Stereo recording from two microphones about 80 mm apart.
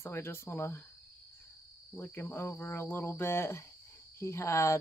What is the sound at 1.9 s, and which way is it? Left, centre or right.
Speech, left.